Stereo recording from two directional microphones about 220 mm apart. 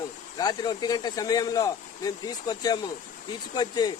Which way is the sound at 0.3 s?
15° left (ahead or behind).